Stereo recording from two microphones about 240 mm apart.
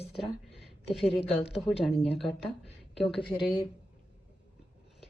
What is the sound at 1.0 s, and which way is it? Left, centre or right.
Speech, left.